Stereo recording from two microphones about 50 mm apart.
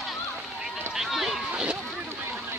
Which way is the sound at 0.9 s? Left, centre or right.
Centre.